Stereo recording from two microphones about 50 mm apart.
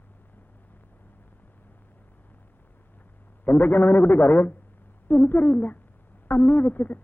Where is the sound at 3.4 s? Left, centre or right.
Left.